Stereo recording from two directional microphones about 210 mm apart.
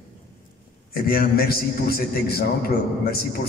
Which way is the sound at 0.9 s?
45° left (ahead or behind).